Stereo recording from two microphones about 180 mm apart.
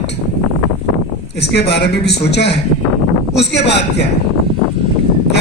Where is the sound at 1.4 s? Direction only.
65° left (ahead or behind).